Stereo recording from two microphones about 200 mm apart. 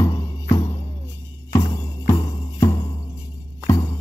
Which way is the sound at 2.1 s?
15° left (ahead or behind).